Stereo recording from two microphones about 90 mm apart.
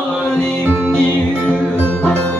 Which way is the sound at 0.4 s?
25° left (ahead or behind).